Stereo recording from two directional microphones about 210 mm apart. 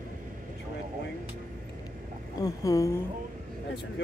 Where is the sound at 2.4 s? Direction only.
15° left (ahead or behind).